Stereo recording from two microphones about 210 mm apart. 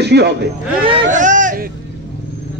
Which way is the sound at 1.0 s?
35° right (ahead or behind).